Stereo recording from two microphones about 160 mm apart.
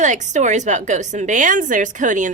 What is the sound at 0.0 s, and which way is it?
A woman's voice, 50° right (ahead or behind).